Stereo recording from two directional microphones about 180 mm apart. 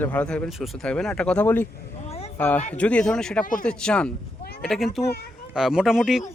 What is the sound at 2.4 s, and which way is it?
A man's voice, 10° left (ahead or behind).